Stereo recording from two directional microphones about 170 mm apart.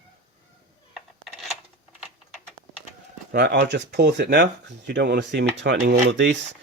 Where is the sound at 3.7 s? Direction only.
90° right.